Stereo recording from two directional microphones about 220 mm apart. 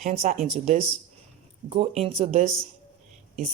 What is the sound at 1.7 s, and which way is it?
Speech, 25° right (ahead or behind).